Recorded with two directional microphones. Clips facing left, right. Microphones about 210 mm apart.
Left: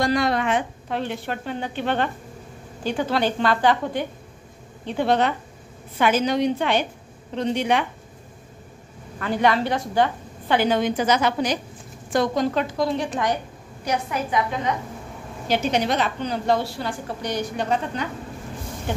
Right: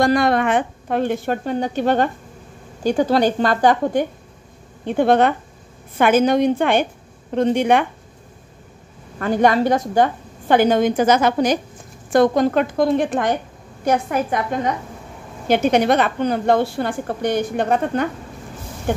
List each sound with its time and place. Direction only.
0.0 s a woman's voice: 50° right (ahead or behind)
9.2 s a woman's voice: 45° right (ahead or behind)